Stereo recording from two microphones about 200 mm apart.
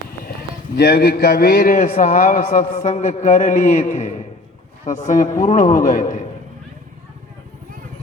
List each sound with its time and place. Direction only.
0.8 s a man's voice: 50° left (ahead or behind)